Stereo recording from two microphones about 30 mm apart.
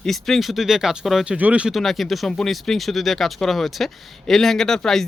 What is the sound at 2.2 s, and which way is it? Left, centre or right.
Speech, centre.